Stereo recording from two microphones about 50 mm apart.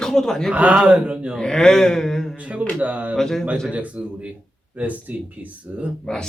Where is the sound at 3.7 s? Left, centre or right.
Right.